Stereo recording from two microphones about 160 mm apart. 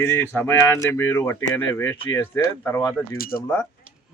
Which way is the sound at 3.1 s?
65° left (ahead or behind).